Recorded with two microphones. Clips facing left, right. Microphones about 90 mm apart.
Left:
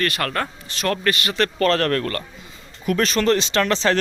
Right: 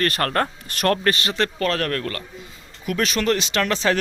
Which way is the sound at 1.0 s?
30° right (ahead or behind).